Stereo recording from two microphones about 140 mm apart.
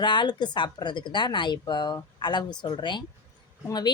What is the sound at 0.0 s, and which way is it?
Speech, 35° left (ahead or behind).